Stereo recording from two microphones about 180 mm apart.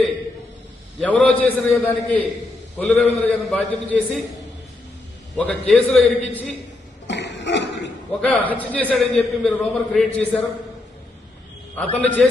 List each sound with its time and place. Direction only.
1.0 s a man's voice: 5° left (ahead or behind)
5.4 s a man's voice: 5° left (ahead or behind)
7.1 s a sound: 80° left
8.2 s a man's voice: 10° left (ahead or behind)
11.8 s a man's voice: 10° left (ahead or behind)